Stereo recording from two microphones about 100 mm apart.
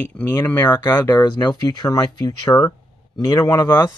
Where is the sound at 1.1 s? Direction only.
40° left (ahead or behind).